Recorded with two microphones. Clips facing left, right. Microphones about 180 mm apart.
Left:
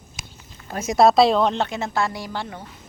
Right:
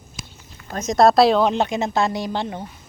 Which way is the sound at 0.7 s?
10° left (ahead or behind).